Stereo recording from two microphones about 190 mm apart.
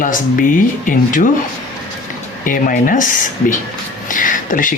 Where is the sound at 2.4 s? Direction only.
45° left (ahead or behind).